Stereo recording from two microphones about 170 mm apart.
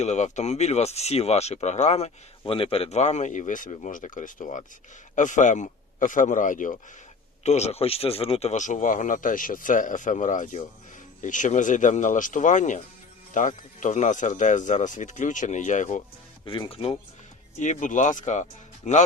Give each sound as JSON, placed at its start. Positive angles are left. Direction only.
{"t": 0.0, "sound": "speech", "side_deg": 45}
{"t": 16.5, "sound": "speech", "side_deg": 30}
{"t": 17.6, "sound": "speech", "side_deg": 45}